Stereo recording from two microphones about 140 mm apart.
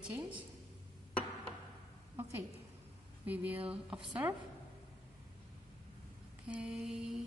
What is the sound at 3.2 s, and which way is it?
A woman's voice, 10° right (ahead or behind).